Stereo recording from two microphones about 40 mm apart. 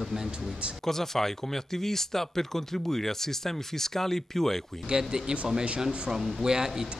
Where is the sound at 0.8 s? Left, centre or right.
Centre.